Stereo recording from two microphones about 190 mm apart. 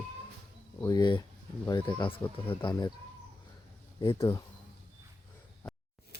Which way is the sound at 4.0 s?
25° left (ahead or behind).